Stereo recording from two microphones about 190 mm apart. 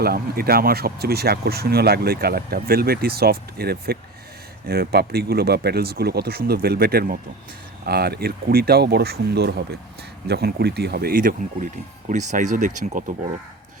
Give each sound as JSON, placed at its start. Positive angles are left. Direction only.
{"t": 0.0, "sound": "speech", "side_deg": -55}